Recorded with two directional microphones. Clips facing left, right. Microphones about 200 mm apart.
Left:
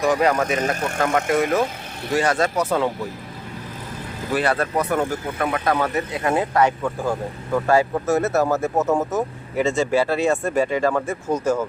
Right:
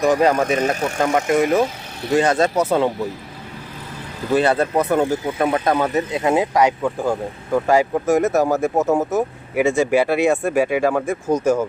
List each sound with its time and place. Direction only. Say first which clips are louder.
0.0 s speech: right 3 dB; 25° right (ahead or behind)
4.4 s speech: right 4 dB; 25° right (ahead or behind)